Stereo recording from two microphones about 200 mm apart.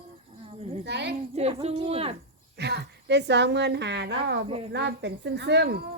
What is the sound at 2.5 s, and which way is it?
A woman's voice, 55° right (ahead or behind).